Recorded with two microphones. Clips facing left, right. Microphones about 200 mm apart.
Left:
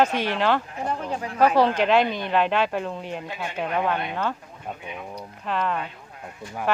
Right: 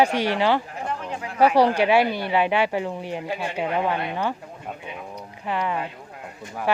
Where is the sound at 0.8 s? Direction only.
40° left (ahead or behind).